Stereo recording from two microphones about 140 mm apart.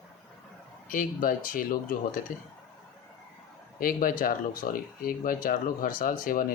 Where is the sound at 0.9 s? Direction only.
75° left (ahead or behind).